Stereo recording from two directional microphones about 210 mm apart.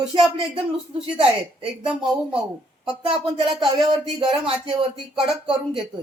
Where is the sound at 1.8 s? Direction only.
5° right (ahead or behind).